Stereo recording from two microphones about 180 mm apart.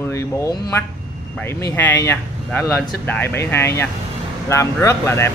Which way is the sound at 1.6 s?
15° left (ahead or behind).